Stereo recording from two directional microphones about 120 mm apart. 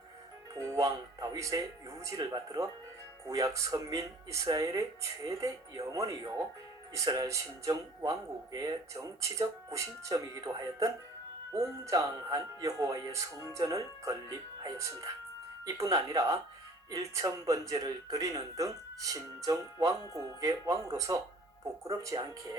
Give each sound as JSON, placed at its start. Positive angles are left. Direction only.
{"t": 0.5, "sound": "speech", "side_deg": -30}